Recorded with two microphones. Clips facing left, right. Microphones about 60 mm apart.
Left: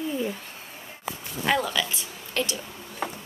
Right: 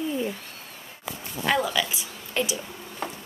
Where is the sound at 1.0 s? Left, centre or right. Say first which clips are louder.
Even; centre.